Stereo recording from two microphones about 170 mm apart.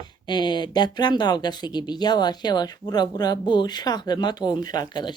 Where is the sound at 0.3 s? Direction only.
25° left (ahead or behind).